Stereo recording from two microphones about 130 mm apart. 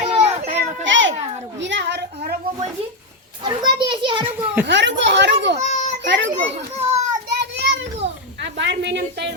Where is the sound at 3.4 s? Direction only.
40° right (ahead or behind).